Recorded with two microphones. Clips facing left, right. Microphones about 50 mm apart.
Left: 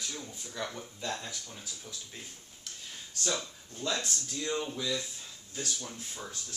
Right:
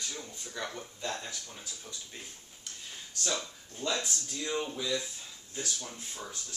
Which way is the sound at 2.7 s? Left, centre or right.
Centre.